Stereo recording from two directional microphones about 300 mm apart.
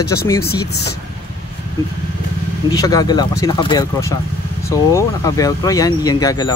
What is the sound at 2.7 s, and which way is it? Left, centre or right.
Speech, centre.